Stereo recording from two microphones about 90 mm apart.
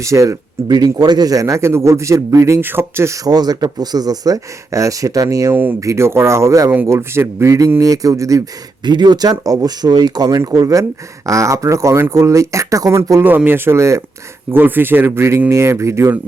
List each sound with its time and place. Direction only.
0.0 s speech: 35° right (ahead or behind)
0.9 s speech: 45° right (ahead or behind); by 3.2 s 30° right (ahead or behind)
3.2 s speech: 45° right (ahead or behind)
5.5 s speech: 20° right (ahead or behind)
5.8 s speech: 35° right (ahead or behind)
8.8 s speech: 55° right (ahead or behind); by 16.1 s 30° right (ahead or behind)